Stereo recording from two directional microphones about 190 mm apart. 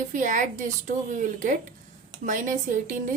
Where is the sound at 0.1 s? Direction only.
45° right (ahead or behind).